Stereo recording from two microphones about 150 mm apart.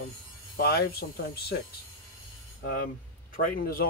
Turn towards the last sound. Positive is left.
turn(degrees=80)